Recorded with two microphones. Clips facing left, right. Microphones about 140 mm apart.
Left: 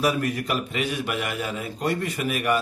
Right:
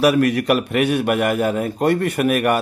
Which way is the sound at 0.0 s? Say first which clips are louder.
Right 8 dB; 75° right (ahead or behind).